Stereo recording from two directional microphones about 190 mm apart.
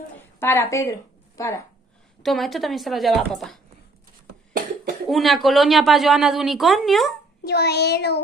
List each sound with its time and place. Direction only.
0.2 s a woman's voice: 10° left (ahead or behind)
2.2 s a woman's voice: centre (ahead or behind)
5.0 s a woman's voice: centre (ahead or behind)
7.4 s child singing: 60° left (ahead or behind)